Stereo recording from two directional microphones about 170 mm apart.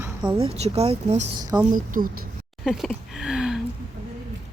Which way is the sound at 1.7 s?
50° right (ahead or behind).